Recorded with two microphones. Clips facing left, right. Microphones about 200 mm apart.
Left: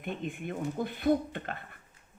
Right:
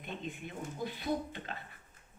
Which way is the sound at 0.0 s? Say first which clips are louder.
Left 6 dB; 55° left (ahead or behind).